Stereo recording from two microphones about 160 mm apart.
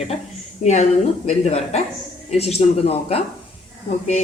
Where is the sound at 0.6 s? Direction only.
45° left (ahead or behind).